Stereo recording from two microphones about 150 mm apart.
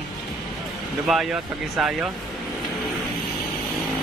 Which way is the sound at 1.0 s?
5° right (ahead or behind).